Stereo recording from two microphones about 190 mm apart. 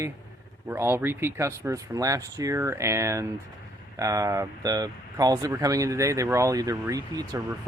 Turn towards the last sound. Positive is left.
turn(degrees=-20)  # may be behind; listen again after turning